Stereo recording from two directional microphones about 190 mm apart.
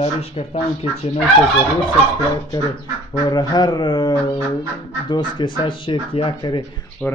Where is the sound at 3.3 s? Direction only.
20° left (ahead or behind).